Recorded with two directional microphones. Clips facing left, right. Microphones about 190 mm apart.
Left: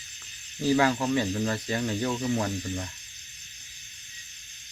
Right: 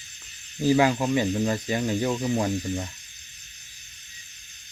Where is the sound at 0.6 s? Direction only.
15° right (ahead or behind).